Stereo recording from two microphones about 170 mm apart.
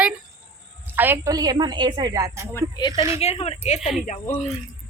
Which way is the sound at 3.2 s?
40° left (ahead or behind).